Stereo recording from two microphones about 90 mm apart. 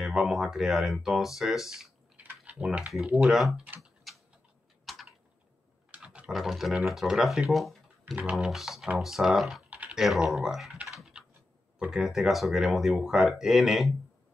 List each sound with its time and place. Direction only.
0.0 s speech: 5° right (ahead or behind)
2.1 s a sound: 15° right (ahead or behind)
3.2 s speech: centre (ahead or behind)
4.9 s typing: centre (ahead or behind)
5.9 s typing: 15° right (ahead or behind)
6.3 s speech: 5° right (ahead or behind)
9.7 s typing: 15° right (ahead or behind)
9.9 s speech: 5° right (ahead or behind)